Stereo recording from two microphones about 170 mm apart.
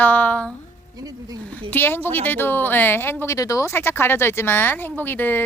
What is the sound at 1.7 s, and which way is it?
Speech, 10° left (ahead or behind).